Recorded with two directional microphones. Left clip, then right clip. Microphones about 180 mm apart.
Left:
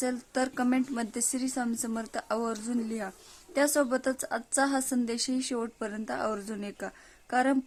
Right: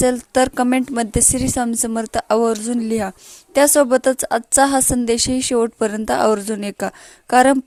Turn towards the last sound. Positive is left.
turn(degrees=-45)  # may be behind; listen again after turning